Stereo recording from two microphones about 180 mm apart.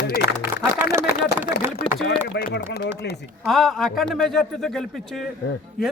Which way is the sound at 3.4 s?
Centre (ahead or behind).